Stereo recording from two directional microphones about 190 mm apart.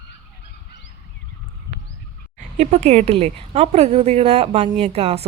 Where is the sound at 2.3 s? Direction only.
35° right (ahead or behind).